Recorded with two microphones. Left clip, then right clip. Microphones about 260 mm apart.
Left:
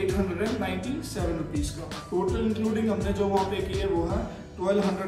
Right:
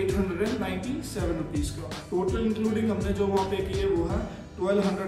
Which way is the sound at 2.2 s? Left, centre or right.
Centre.